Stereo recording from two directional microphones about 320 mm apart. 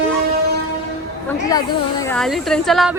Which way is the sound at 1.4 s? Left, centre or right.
Centre.